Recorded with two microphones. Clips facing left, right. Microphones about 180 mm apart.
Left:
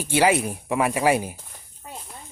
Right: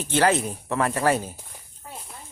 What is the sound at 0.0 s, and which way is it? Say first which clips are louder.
Speech: left 1 dB; 10° left (ahead or behind).